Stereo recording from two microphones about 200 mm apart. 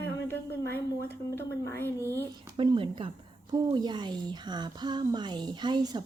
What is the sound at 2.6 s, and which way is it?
A woman's voice, 25° right (ahead or behind).